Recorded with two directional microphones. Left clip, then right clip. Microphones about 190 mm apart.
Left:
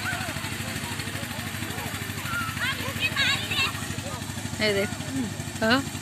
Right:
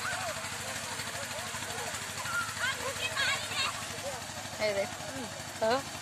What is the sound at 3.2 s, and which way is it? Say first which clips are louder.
Vehicle: left 7 dB; 60° right (ahead or behind).